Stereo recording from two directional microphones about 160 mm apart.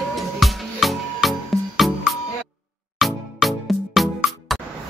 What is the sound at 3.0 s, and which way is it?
Music, centre (ahead or behind).